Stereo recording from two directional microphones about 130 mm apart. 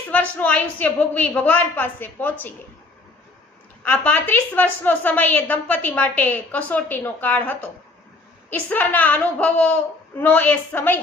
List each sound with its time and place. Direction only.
0.1 s a woman's voice: 10° left (ahead or behind)
3.8 s a woman's voice: 15° left (ahead or behind)